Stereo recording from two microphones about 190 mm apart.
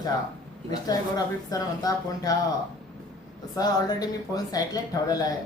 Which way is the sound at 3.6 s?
20° left (ahead or behind).